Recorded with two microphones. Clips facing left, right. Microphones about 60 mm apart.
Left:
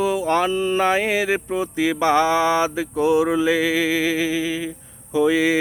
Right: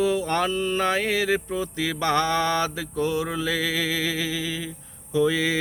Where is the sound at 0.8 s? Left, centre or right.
Centre.